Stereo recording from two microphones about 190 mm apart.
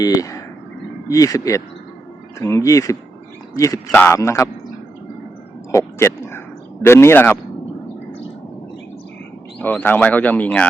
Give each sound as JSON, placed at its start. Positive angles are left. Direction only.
{"t": 0.0, "sound": "speech", "side_deg": 20}
{"t": 5.7, "sound": "speech", "side_deg": 15}
{"t": 9.6, "sound": "speech", "side_deg": 10}